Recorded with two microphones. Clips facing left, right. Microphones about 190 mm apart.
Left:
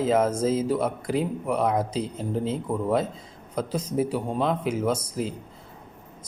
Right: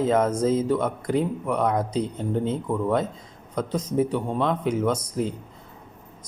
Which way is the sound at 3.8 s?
10° left (ahead or behind).